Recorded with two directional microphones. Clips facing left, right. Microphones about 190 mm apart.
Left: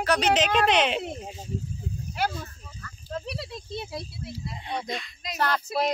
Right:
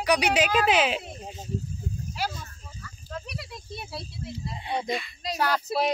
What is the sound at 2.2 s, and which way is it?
Snake, 55° left (ahead or behind).